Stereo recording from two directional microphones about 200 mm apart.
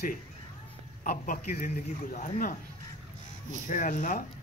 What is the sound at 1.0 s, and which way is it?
A man's voice, 45° left (ahead or behind).